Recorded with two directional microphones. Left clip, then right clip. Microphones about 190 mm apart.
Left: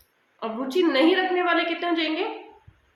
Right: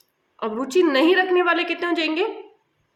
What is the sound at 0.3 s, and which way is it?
A woman's voice, 45° right (ahead or behind).